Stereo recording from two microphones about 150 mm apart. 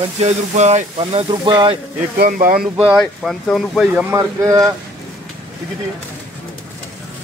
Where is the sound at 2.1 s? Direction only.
70° right (ahead or behind).